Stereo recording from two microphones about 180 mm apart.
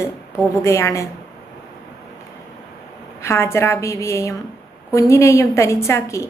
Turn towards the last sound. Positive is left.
turn(degrees=15)  # may be behind; listen again after turning